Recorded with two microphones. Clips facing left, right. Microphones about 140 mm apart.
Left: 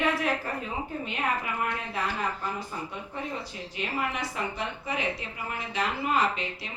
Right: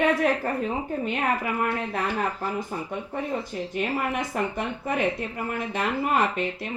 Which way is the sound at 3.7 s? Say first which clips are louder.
Right 4 dB; 50° right (ahead or behind).